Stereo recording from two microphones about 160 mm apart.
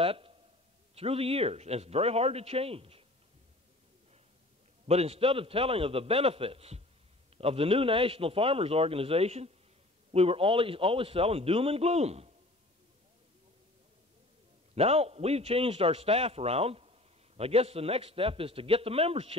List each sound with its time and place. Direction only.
0.0 s a sound: 35° right (ahead or behind)
0.9 s a man's voice: 40° right (ahead or behind)
4.8 s a man's voice: 40° right (ahead or behind)
14.8 s a man's voice: 40° right (ahead or behind)